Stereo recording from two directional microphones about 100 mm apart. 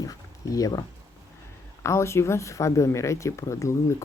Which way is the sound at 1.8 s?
30° left (ahead or behind).